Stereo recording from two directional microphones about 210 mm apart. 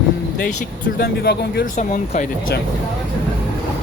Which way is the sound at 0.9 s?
50° left (ahead or behind).